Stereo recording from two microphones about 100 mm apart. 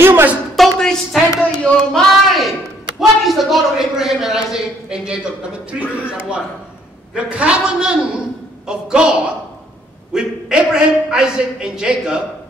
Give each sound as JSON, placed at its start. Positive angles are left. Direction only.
{"t": 0.0, "sound": "speech", "side_deg": -20}
{"t": 0.6, "sound": "a man's voice", "side_deg": 5}
{"t": 7.2, "sound": "a man's voice", "side_deg": -10}
{"t": 10.1, "sound": "a man's voice", "side_deg": -10}